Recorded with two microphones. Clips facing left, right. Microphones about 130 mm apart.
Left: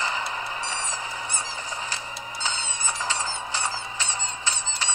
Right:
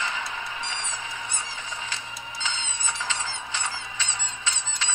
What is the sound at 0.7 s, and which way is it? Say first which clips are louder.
Fowl: left 3 dB; 40° left (ahead or behind).